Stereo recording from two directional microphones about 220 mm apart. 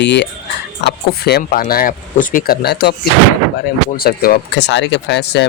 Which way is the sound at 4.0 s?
45° left (ahead or behind).